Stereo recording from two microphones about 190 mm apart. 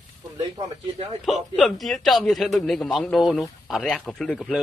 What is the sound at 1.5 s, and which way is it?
A man's voice, centre (ahead or behind).